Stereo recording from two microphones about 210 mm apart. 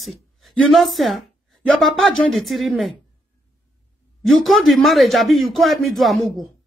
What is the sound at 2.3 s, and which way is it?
Speech, centre (ahead or behind).